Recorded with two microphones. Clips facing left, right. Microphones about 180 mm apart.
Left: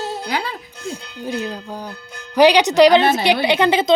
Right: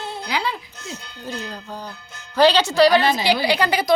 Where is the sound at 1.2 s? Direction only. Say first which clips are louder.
Left 7 dB; 15° left (ahead or behind).